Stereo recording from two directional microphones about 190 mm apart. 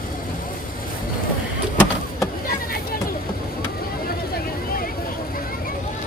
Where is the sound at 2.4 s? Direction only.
50° left (ahead or behind).